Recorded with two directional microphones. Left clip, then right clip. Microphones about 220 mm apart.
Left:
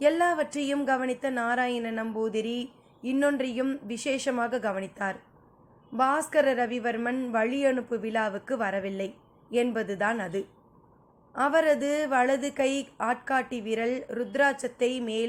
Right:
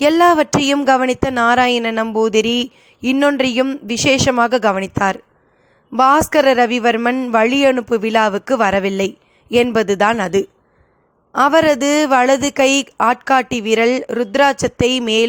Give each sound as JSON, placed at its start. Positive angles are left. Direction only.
{"t": 0.0, "sound": "speech", "side_deg": -45}